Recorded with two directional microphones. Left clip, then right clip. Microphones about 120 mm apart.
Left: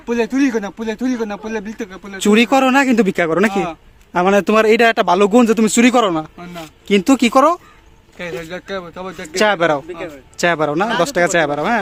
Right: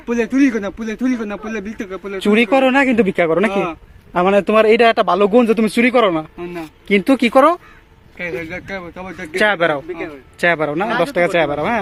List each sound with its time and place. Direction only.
0.1 s a man's voice: 10° left (ahead or behind)
2.2 s a man's voice: 60° left (ahead or behind); by 7.6 s 40° left (ahead or behind)
8.2 s a man's voice: 15° left (ahead or behind)
9.4 s a man's voice: 35° left (ahead or behind)